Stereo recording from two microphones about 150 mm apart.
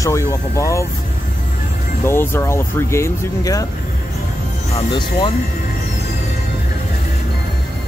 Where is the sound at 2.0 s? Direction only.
15° left (ahead or behind).